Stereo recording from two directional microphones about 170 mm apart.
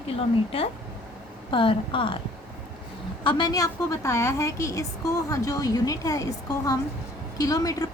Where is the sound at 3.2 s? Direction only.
25° left (ahead or behind).